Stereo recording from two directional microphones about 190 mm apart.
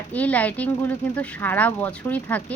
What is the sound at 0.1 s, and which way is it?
Speech, 10° left (ahead or behind).